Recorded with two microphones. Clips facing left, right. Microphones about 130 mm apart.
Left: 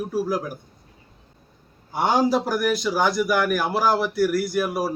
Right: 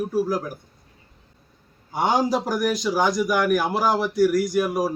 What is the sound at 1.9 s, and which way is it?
A man's voice, 5° left (ahead or behind).